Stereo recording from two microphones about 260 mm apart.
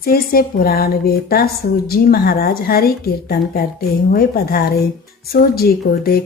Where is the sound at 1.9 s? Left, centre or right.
Left.